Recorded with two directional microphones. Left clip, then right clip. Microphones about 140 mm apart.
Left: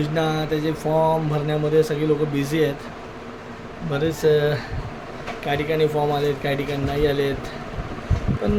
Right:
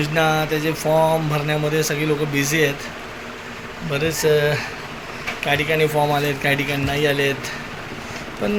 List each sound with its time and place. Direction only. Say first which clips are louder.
0.0 s speech: right 4 dB; 15° left (ahead or behind)
3.9 s speech: right 1 dB; 25° left (ahead or behind)